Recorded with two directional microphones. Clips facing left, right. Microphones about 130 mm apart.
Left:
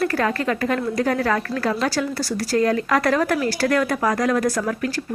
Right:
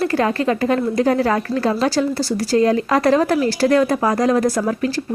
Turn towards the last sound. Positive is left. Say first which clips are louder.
# right 4 dB
turn(degrees=-25)  # may be behind; listen again after turning